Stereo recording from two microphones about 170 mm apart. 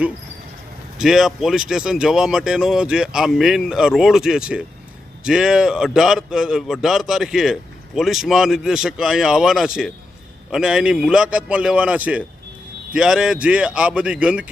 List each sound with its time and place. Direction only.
0.9 s a man's voice: centre (ahead or behind)